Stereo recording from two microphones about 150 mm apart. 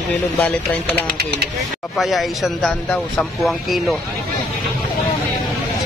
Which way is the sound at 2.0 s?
Centre (ahead or behind).